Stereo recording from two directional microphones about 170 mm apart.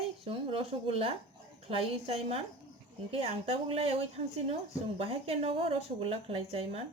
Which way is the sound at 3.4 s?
35° right (ahead or behind).